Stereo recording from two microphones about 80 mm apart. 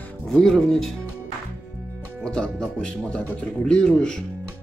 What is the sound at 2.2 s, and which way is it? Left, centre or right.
A man's voice, centre.